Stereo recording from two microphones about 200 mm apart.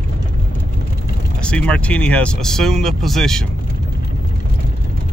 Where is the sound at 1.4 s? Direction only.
5° left (ahead or behind).